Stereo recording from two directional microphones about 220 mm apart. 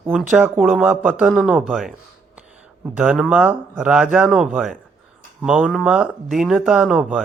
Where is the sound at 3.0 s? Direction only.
5° right (ahead or behind).